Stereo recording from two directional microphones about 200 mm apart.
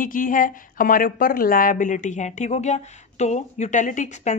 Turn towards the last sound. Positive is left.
turn(degrees=35)  # may be behind; listen again after turning